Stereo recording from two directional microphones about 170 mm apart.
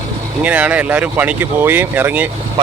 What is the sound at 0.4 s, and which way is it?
Speech, 10° right (ahead or behind).